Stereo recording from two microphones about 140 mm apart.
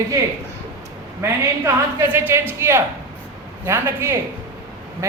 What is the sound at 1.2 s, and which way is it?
A woman's voice, 20° right (ahead or behind).